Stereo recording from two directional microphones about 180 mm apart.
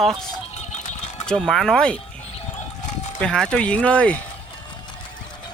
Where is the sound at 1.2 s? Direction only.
5° left (ahead or behind).